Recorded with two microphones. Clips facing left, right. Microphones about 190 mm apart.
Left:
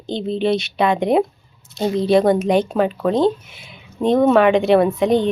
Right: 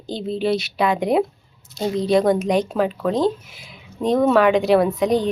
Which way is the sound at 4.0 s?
25° left (ahead or behind).